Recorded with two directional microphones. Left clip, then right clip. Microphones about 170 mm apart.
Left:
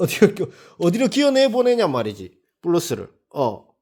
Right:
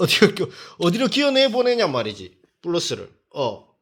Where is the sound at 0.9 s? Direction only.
30° left (ahead or behind).